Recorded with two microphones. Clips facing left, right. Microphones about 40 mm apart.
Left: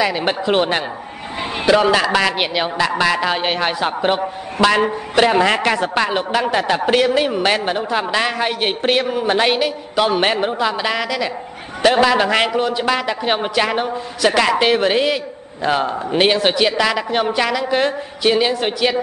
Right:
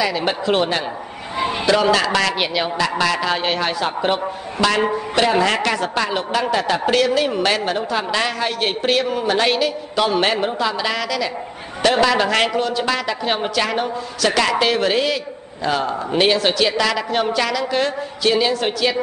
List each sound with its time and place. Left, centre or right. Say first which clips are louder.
0.0 s a man's voice: left 2 dB; left